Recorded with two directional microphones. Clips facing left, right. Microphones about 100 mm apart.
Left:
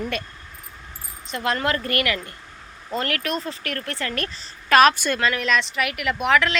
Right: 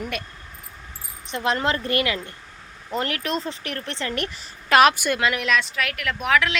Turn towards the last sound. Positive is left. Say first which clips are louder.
# left 2 dB
turn(degrees=0)  # may be behind; listen again after turning